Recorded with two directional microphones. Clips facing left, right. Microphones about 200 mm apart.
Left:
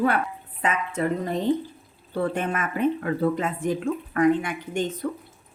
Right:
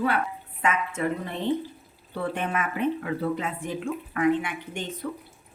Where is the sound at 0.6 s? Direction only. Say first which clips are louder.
Left 1 dB; 35° left (ahead or behind).